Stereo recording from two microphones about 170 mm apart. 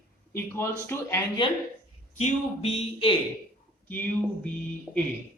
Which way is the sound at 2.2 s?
40° left (ahead or behind).